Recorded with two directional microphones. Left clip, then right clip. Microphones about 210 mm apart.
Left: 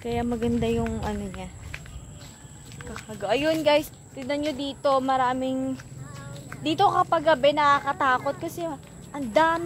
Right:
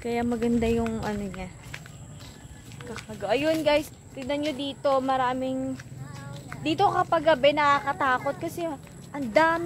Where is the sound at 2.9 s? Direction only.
15° left (ahead or behind).